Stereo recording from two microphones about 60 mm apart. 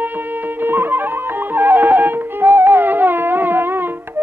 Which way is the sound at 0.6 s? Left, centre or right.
Right.